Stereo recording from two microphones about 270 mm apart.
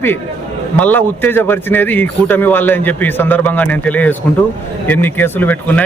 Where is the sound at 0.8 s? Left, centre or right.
Centre.